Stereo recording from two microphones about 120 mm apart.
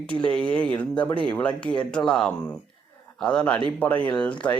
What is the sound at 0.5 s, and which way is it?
Speech, 10° left (ahead or behind).